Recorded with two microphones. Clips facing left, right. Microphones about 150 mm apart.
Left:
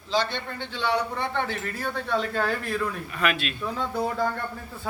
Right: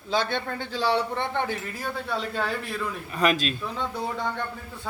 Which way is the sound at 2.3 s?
Centre (ahead or behind).